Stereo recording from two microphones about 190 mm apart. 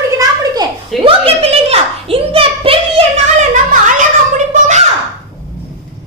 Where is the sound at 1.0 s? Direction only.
30° right (ahead or behind).